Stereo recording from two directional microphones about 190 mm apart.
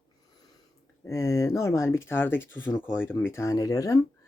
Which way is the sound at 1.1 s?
15° left (ahead or behind).